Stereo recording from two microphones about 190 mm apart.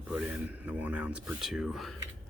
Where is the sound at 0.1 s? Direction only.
5° right (ahead or behind).